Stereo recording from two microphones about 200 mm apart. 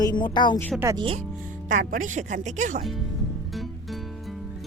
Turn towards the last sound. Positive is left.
turn(degrees=0)  # may be behind; listen again after turning